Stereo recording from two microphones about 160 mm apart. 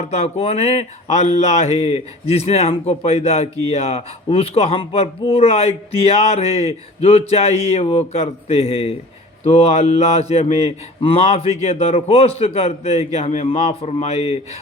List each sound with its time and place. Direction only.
0.0 s speech: 40° left (ahead or behind)